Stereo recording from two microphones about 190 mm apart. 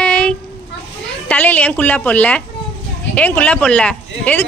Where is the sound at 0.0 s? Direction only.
5° left (ahead or behind).